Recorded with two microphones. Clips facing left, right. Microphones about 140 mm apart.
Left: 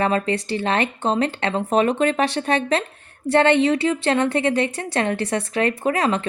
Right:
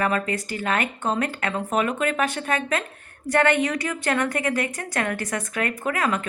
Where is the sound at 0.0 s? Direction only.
30° left (ahead or behind).